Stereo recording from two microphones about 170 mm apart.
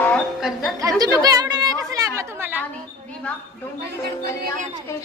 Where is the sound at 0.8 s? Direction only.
20° right (ahead or behind).